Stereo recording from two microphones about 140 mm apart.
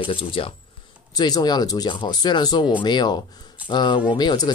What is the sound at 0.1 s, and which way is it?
Speech, 40° left (ahead or behind).